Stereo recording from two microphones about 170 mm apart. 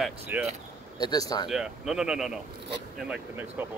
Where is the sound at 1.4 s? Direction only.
5° right (ahead or behind).